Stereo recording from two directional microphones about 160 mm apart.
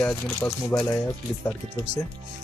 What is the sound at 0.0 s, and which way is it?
Speech, 5° left (ahead or behind).